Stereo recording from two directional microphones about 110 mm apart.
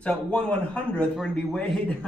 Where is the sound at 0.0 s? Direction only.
10° left (ahead or behind).